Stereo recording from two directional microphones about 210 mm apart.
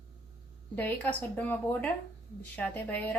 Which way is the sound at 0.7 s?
5° left (ahead or behind).